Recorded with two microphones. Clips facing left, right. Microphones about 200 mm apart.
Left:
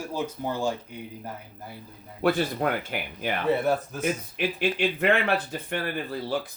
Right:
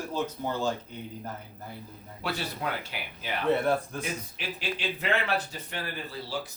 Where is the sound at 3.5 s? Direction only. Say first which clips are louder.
Even; 5° left (ahead or behind).